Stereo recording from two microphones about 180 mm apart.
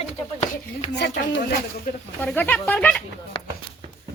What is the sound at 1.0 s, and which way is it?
Speech, 70° left (ahead or behind).